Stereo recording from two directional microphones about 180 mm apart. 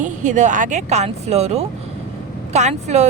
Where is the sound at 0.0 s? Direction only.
45° right (ahead or behind).